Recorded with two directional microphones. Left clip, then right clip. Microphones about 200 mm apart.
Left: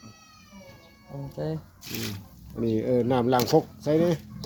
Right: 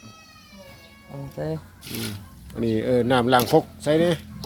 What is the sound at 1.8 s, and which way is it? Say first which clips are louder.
Speech: right 2 dB; 15° left (ahead or behind).